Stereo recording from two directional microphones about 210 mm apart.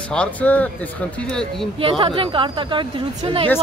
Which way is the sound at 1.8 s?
25° right (ahead or behind).